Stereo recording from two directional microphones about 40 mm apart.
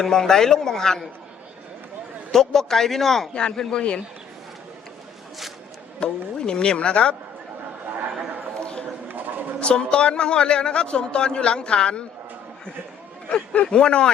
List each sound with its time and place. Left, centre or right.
0.0 s speech: centre
2.3 s speech: centre
3.5 s a man's voice: centre
6.0 s a man's voice: left
9.6 s a man's voice: left
13.3 s a man's voice: left